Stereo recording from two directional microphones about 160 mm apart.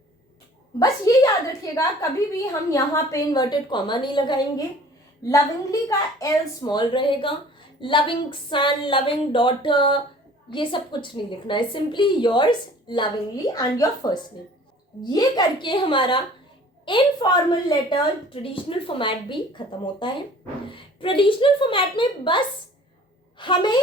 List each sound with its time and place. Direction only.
0.8 s a woman's voice: 20° left (ahead or behind)
5.9 s a woman's voice: 20° left (ahead or behind)